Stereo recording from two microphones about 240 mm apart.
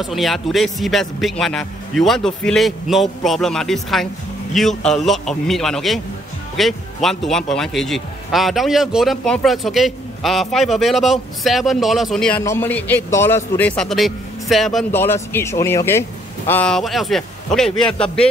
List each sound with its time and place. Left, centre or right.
0.0 s speech: centre